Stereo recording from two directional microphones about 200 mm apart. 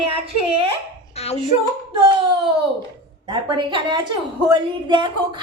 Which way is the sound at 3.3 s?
25° right (ahead or behind).